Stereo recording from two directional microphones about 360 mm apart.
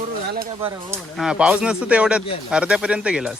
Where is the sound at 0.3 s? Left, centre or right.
Right.